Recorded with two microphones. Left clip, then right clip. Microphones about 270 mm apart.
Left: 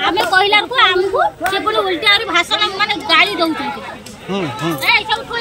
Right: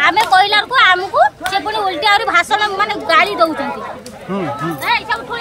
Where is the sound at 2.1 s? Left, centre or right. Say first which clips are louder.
Right 2 dB; centre.